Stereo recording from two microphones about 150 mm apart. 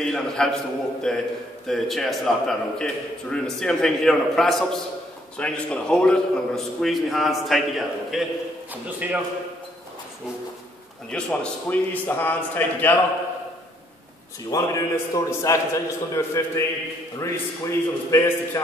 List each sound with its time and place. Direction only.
0.0 s a man's voice: 5° left (ahead or behind)
11.1 s a man's voice: 5° left (ahead or behind)
14.5 s a man's voice: 20° left (ahead or behind)